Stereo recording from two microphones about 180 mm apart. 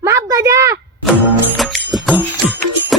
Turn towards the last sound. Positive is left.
turn(degrees=0)  # may be behind; listen again after turning